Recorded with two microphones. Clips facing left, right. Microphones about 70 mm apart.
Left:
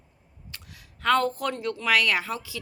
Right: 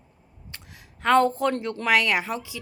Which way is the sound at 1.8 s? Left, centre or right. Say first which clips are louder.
Right 2 dB; right.